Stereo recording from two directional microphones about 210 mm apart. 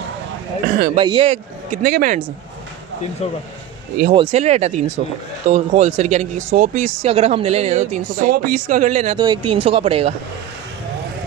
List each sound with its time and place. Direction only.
0.7 s a sound: 40° right (ahead or behind)
0.9 s speech: 25° right (ahead or behind); by 2.2 s 40° right (ahead or behind)
4.1 s speech: 30° right (ahead or behind)
9.1 s speech: 20° right (ahead or behind)